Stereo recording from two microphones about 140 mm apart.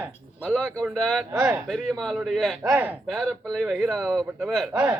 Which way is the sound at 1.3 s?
20° right (ahead or behind).